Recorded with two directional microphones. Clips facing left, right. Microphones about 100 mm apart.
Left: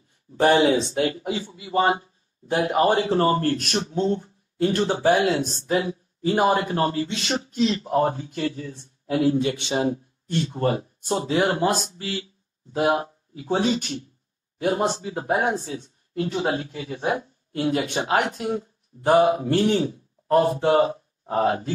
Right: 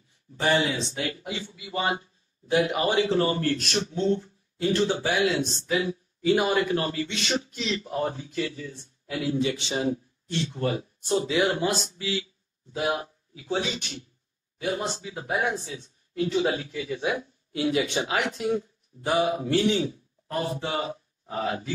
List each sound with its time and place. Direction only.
0.4 s speech: 50° left (ahead or behind)